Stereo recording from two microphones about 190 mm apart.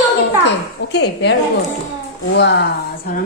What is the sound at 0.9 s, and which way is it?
Speech, 65° left (ahead or behind).